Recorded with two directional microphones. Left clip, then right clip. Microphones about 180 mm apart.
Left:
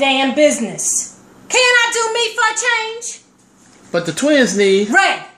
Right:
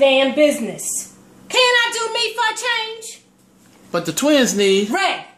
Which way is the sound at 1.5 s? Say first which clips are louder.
Left 3 dB; 5° right (ahead or behind).